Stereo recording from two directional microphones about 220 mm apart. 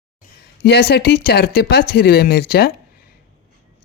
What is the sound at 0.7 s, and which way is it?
Speech, 50° left (ahead or behind).